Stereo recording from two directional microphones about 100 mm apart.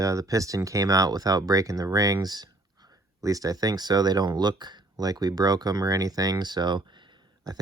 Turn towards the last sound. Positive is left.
turn(degrees=-45)  # may be behind; listen again after turning